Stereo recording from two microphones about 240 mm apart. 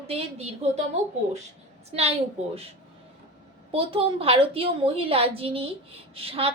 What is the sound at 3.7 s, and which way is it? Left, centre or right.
A woman's voice, right.